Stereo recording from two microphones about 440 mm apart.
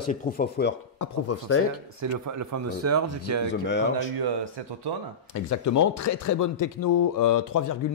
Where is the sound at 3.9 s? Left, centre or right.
Right.